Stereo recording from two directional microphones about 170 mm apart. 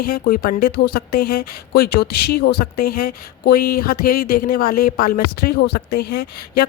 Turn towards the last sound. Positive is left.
turn(degrees=70)  # may be behind; listen again after turning